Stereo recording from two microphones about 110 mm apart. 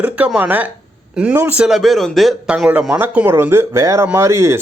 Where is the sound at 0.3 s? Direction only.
15° right (ahead or behind).